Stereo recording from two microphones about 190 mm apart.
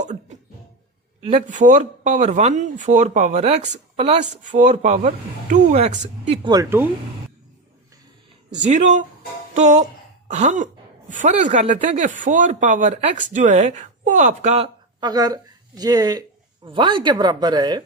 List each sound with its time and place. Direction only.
0.0 s a sound: 40° right (ahead or behind)
1.3 s speech: 40° right (ahead or behind)
6.4 s speech: 20° right (ahead or behind)
8.5 s speech: 40° right (ahead or behind)
15.0 s speech: 20° right (ahead or behind)